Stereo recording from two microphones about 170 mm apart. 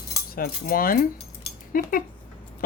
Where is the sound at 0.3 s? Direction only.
60° left (ahead or behind).